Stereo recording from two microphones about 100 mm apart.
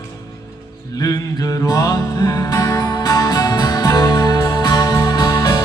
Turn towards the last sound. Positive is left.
turn(degrees=40)  # may be behind; listen again after turning